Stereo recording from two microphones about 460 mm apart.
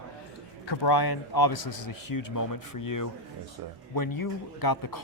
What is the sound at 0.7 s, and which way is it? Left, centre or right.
Speech, left.